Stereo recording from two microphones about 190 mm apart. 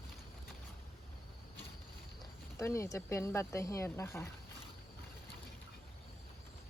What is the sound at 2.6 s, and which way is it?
Speech, 15° left (ahead or behind).